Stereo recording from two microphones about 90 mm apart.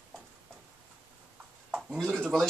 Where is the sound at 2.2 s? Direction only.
Centre (ahead or behind).